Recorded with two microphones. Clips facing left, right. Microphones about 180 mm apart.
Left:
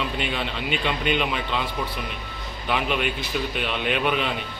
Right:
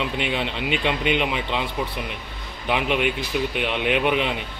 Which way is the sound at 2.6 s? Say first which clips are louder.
Right 3 dB; 20° right (ahead or behind).